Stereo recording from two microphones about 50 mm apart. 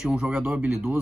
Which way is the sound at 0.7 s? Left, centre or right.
Centre.